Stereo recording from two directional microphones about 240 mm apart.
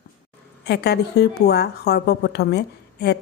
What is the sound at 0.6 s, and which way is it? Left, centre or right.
A woman's voice, left.